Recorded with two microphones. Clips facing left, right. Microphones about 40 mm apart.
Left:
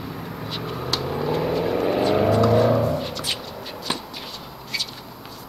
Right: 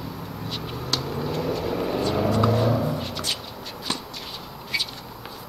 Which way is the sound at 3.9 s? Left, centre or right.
Centre.